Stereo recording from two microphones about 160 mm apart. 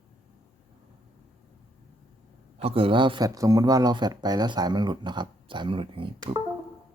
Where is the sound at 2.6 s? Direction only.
35° right (ahead or behind).